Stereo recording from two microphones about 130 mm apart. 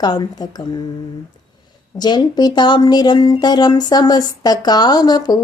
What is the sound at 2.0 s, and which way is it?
A woman's voice, 35° left (ahead or behind).